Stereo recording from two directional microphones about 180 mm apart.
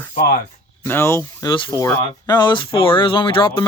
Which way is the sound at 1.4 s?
25° left (ahead or behind).